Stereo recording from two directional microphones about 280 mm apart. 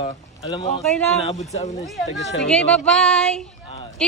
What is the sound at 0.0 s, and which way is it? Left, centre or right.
Speech, centre.